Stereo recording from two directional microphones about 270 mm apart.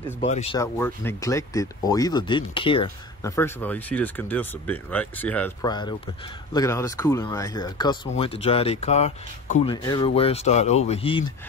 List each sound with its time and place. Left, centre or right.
0.2 s speech: left
0.6 s speech: centre